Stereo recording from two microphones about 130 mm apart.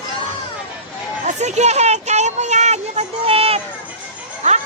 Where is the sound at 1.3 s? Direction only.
60° right (ahead or behind).